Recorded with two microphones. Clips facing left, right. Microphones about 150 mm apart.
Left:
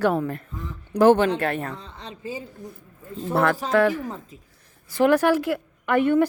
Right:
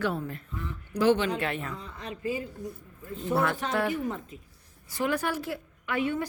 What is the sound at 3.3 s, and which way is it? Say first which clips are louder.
Speech: left 5 dB; 75° left (ahead or behind).